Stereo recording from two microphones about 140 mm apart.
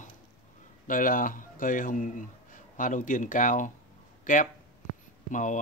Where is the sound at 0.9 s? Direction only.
75° left (ahead or behind).